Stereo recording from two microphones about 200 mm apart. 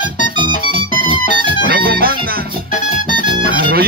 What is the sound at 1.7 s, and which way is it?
Music, 50° right (ahead or behind).